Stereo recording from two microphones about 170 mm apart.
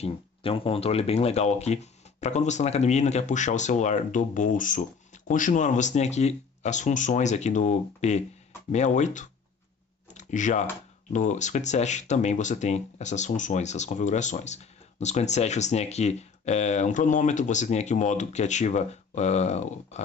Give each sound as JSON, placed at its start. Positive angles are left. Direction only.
{"t": 0.0, "sound": "speech", "side_deg": 35}